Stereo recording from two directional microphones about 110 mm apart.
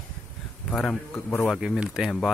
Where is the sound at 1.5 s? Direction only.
10° right (ahead or behind).